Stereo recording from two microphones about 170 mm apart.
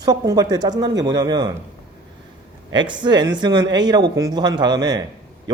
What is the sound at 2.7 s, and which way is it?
Speech, 25° right (ahead or behind).